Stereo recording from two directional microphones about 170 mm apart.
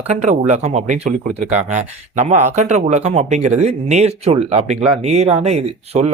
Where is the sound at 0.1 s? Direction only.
45° right (ahead or behind).